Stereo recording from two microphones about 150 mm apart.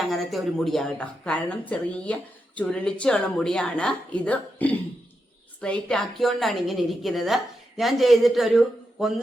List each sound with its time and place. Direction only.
0.1 s a woman's voice: centre (ahead or behind)